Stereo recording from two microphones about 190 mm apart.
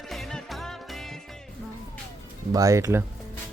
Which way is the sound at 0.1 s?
Centre (ahead or behind).